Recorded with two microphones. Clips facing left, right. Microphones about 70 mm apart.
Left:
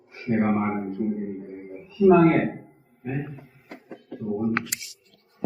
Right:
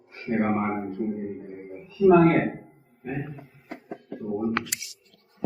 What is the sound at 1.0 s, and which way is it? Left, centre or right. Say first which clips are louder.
Speech: left 3 dB; centre.